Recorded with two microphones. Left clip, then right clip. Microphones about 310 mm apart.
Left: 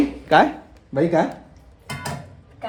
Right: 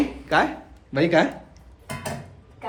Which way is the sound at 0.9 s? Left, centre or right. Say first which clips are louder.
Even; centre.